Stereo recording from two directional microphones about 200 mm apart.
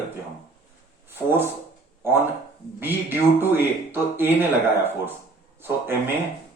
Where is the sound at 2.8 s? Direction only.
10° right (ahead or behind).